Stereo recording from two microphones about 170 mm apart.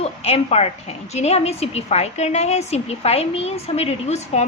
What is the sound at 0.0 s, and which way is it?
A woman's voice, 35° left (ahead or behind).